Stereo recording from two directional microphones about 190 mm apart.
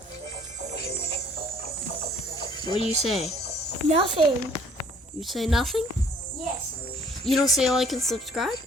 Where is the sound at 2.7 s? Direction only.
30° right (ahead or behind).